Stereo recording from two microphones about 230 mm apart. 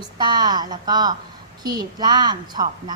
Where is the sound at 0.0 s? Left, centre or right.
Centre.